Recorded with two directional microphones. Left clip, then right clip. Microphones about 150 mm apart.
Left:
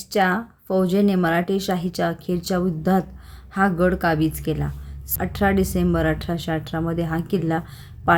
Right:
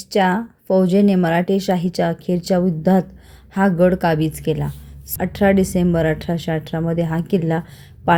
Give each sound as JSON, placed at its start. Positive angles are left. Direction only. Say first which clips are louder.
{"t": 0.0, "sound": "a woman's voice", "louder": "right 3 dB", "side_deg": -20}